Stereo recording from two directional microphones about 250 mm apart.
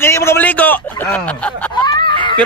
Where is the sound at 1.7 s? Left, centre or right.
Centre.